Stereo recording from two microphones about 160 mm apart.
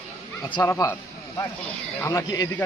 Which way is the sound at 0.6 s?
15° left (ahead or behind).